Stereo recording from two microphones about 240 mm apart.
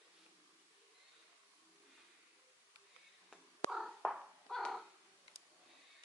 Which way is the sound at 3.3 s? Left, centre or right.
Centre.